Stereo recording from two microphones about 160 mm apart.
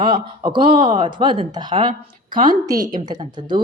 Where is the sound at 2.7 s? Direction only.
25° right (ahead or behind).